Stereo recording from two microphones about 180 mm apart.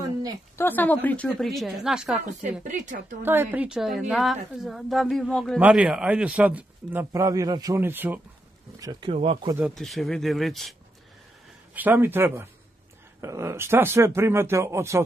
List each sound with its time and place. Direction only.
0.0 s a sound: 20° right (ahead or behind)
0.6 s a woman's voice: 10° left (ahead or behind)
2.7 s a woman's voice: 45° right (ahead or behind)
3.2 s a woman's voice: 10° right (ahead or behind)
9.1 s speech: 30° right (ahead or behind)
9.8 s a woman's voice: centre (ahead or behind)
11.7 s speech: 10° right (ahead or behind)